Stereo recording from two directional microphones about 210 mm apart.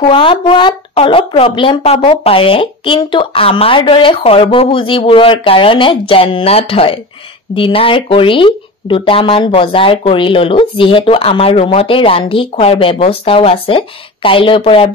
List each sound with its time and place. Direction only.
0.1 s speech: 25° left (ahead or behind)